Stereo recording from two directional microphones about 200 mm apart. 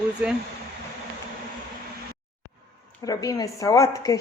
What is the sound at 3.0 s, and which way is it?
A woman's voice, 20° left (ahead or behind).